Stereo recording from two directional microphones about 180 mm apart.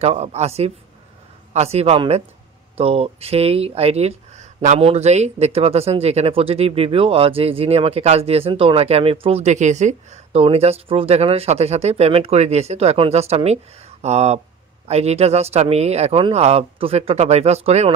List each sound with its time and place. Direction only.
0.0 s speech: 35° right (ahead or behind)